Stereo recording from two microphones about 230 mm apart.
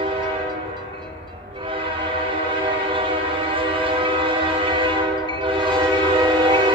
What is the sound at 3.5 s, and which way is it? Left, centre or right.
Train, right.